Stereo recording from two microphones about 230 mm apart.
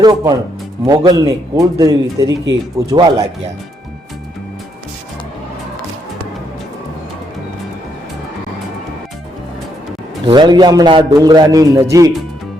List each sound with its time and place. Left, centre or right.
0.0 s a man's voice: centre
10.2 s a man's voice: centre